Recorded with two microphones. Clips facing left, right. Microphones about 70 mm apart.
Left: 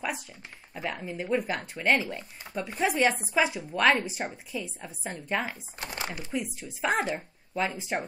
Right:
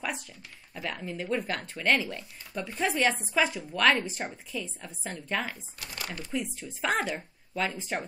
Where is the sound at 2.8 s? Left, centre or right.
Centre.